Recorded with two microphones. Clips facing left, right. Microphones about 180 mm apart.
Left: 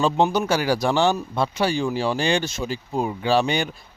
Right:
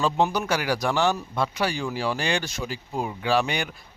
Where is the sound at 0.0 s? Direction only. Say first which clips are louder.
Left 3 dB; 25° left (ahead or behind).